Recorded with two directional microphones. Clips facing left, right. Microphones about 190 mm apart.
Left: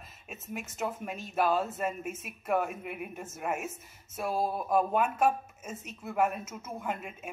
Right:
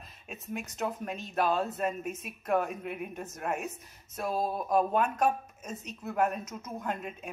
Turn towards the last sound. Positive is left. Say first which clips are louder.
# right 1 dB
turn(degrees=5)  # may be behind; listen again after turning